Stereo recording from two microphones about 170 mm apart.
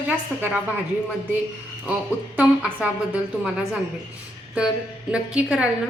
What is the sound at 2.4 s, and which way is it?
A woman's voice, 5° right (ahead or behind).